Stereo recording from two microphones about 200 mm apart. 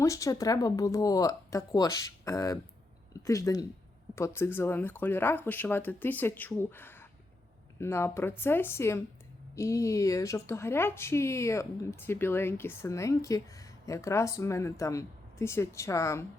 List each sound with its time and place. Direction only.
0.0 s a woman's voice: 15° left (ahead or behind)